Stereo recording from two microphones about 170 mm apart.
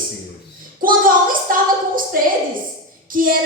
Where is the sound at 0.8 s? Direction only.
55° right (ahead or behind).